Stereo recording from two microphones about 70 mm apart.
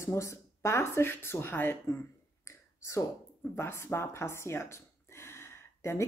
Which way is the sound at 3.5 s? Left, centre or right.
Left.